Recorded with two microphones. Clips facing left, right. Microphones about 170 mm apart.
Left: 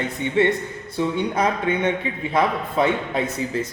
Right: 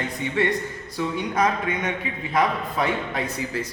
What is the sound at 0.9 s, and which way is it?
A man's voice, 30° left (ahead or behind).